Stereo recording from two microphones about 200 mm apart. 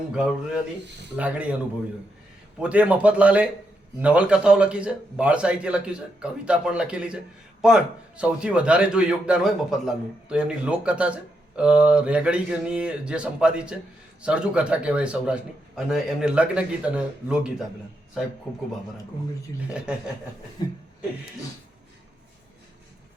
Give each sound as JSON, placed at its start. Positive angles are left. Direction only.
{"t": 0.1, "sound": "a man's voice", "side_deg": -5}
{"t": 0.9, "sound": "speech", "side_deg": -60}
{"t": 1.1, "sound": "speech", "side_deg": -5}
{"t": 2.6, "sound": "a man's voice", "side_deg": -5}
{"t": 20.6, "sound": "a sound", "side_deg": 20}